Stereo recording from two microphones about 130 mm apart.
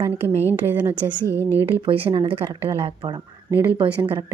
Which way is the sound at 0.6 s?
15° right (ahead or behind).